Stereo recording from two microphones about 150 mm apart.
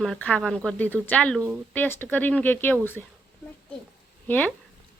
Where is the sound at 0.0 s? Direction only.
5° left (ahead or behind).